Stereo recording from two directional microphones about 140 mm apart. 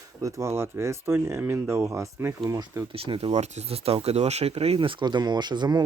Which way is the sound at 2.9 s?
40° right (ahead or behind).